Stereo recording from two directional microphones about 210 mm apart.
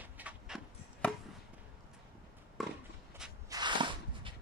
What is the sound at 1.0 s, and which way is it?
Chop, 5° left (ahead or behind).